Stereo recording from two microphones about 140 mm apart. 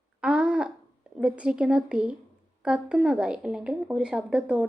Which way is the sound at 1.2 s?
5° right (ahead or behind).